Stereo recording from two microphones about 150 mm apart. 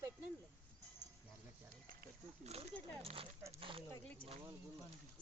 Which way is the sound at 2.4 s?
45° right (ahead or behind).